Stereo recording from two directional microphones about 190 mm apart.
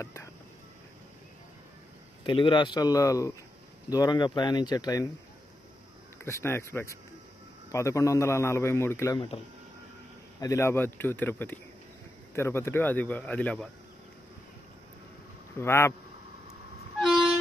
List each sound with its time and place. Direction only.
0.0 s speech: 15° left (ahead or behind)
2.2 s speech: 25° left (ahead or behind)
6.2 s a man's voice: 15° left (ahead or behind)
10.4 s a man's voice: 15° left (ahead or behind)
15.5 s a man's voice: 15° left (ahead or behind)